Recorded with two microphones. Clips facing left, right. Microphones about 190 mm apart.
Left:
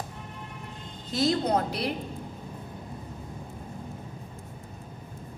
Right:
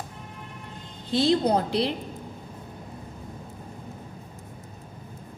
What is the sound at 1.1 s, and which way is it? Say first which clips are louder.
Speech: right 3 dB; 30° right (ahead or behind).